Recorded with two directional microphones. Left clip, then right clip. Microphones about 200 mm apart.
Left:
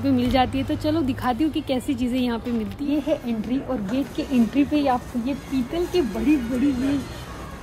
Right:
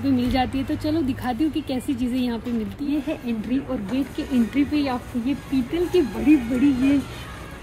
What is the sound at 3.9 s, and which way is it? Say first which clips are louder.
Speech: even; 45° left (ahead or behind).